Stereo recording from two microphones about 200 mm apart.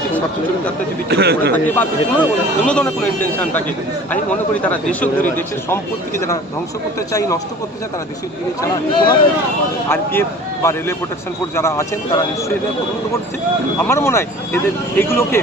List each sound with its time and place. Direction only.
1.1 s a man's voice: 55° right (ahead or behind)
1.5 s speech: 10° left (ahead or behind)
4.7 s speech: 10° left (ahead or behind)
8.6 s speech: 25° left (ahead or behind)
9.9 s speech: 10° left (ahead or behind)
13.7 s speech: 10° left (ahead or behind)